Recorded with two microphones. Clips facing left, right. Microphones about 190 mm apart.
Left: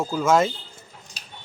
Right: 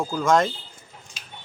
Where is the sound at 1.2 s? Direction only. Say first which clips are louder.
Even; 40° left (ahead or behind).